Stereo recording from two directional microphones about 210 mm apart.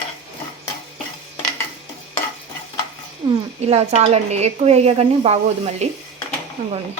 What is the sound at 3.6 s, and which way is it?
A woman's voice, 30° right (ahead or behind).